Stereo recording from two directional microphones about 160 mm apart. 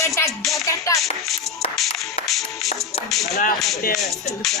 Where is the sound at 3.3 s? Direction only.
55° left (ahead or behind).